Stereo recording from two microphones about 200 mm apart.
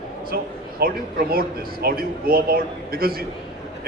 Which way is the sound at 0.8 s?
50° right (ahead or behind).